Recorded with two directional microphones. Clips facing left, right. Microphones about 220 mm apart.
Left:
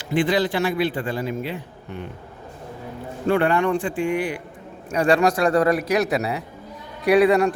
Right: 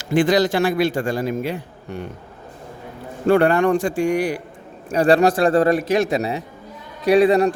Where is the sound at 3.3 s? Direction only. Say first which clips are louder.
Right 4 dB; 45° right (ahead or behind).